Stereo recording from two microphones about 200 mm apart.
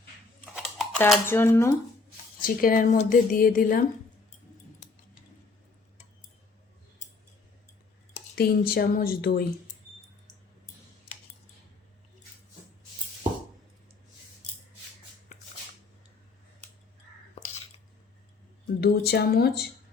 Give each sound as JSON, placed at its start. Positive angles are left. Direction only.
{"t": 0.4, "sound": "a sound", "side_deg": -5}
{"t": 0.9, "sound": "speech", "side_deg": 10}
{"t": 2.4, "sound": "a woman's voice", "side_deg": 45}
{"t": 8.4, "sound": "a woman's voice", "side_deg": 50}
{"t": 18.8, "sound": "a woman's voice", "side_deg": 55}